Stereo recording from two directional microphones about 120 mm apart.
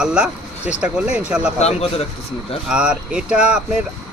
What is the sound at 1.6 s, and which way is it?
Speech, 60° left (ahead or behind).